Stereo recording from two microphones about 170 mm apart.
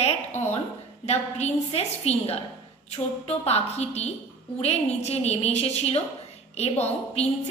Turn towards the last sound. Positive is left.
turn(degrees=40)  # may be behind; listen again after turning